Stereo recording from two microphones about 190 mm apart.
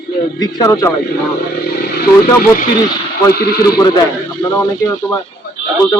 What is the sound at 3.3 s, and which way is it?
Speech, 55° left (ahead or behind).